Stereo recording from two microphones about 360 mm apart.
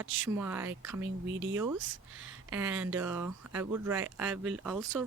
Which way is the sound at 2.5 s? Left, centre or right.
Centre.